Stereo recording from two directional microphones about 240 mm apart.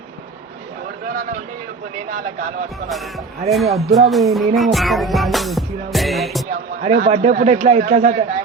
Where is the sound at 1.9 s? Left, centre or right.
Right.